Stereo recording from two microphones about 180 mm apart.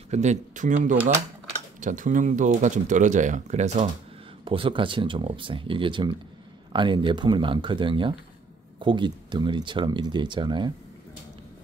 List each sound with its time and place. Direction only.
0.1 s speech: 40° right (ahead or behind)
4.5 s speech: 30° right (ahead or behind)